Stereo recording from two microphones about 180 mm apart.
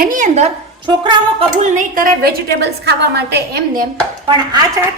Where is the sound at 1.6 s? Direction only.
50° right (ahead or behind); by 3.6 s 65° right (ahead or behind).